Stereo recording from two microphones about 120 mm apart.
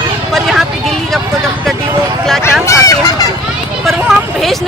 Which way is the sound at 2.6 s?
25° left (ahead or behind).